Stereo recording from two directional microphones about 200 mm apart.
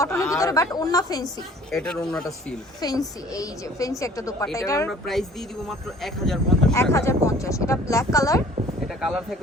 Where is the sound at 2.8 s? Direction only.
20° left (ahead or behind).